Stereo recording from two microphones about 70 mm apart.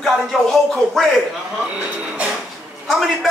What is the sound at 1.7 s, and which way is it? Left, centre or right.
Speech, centre.